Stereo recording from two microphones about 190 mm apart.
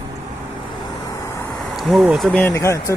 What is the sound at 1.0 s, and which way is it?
Vehicle, 15° left (ahead or behind).